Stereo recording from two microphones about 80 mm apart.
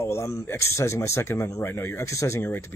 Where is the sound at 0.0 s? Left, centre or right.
Left.